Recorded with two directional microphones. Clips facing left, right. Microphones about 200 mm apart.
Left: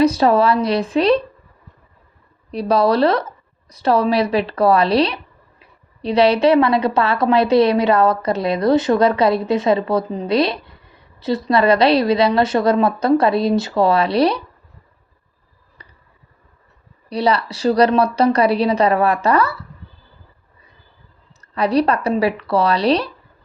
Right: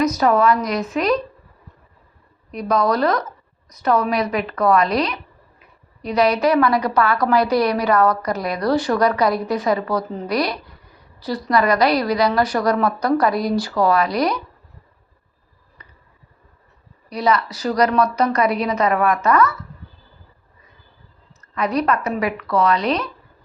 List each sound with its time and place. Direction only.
0.0 s a woman's voice: 30° left (ahead or behind)
2.5 s speech: 30° left (ahead or behind)
15.8 s a sound: 35° left (ahead or behind)
17.1 s a woman's voice: 30° left (ahead or behind)
21.5 s a woman's voice: 30° left (ahead or behind)